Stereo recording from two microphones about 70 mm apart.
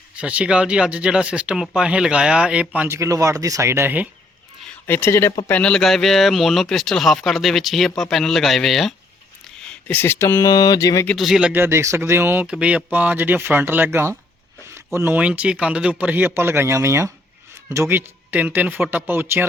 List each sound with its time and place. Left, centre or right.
0.2 s speech: centre
2.8 s speech: right
4.9 s speech: left
5.5 s speech: centre
9.9 s speech: left
10.4 s speech: left
11.5 s speech: right
12.5 s speech: centre; by 14.2 s right
15.1 s speech: centre